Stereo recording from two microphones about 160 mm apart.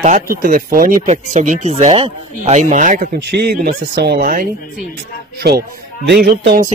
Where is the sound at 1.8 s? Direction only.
35° right (ahead or behind); by 3.2 s 55° right (ahead or behind).